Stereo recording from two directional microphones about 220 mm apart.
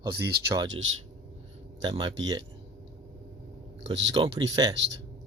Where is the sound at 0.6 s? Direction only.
65° right (ahead or behind).